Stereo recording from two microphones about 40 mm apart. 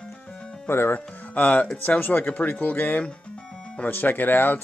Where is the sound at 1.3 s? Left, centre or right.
Left.